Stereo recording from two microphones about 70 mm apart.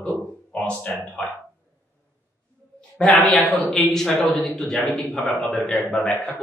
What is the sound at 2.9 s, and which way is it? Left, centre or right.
Speech, centre.